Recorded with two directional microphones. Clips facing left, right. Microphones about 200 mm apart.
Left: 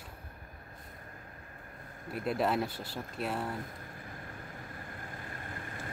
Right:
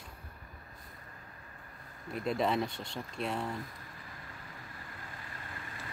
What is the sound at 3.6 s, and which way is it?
Vehicle, 50° left (ahead or behind).